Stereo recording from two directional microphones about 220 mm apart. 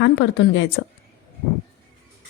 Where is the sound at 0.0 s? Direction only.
55° left (ahead or behind).